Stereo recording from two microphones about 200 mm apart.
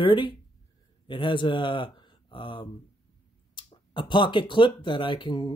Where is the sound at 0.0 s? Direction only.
25° left (ahead or behind).